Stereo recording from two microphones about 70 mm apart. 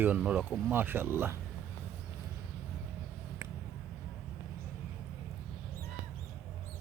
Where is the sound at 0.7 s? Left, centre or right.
Right.